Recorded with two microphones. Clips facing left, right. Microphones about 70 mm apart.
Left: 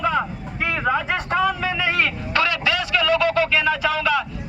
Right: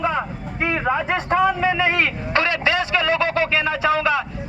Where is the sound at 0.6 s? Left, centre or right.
Right.